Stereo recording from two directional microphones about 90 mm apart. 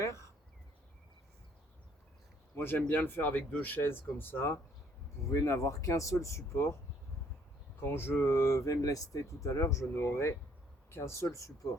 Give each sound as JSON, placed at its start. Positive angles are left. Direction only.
{"t": 0.0, "sound": "a sound", "side_deg": 35}
{"t": 2.6, "sound": "speech", "side_deg": 25}
{"t": 7.8, "sound": "speech", "side_deg": 25}